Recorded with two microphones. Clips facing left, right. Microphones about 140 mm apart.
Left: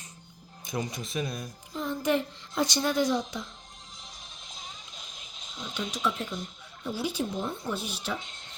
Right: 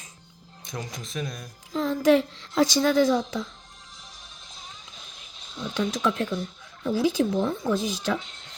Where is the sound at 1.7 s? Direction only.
90° right.